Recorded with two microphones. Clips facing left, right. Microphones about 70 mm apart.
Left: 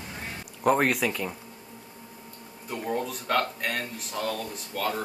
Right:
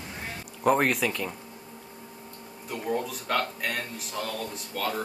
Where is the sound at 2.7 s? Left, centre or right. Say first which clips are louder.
Even; centre.